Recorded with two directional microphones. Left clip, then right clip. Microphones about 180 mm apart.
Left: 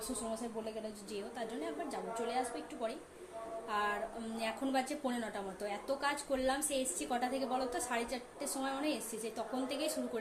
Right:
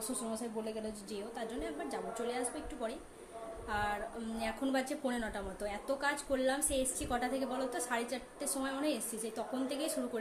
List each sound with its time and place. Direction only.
0.2 s a woman's voice: centre (ahead or behind)
3.7 s a woman's voice: 5° left (ahead or behind)